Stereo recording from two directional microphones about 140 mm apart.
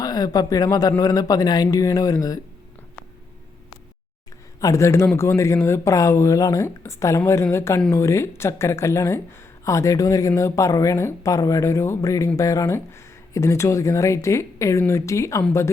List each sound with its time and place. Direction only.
0.0 s speech: 25° left (ahead or behind)
4.6 s speech: 20° left (ahead or behind)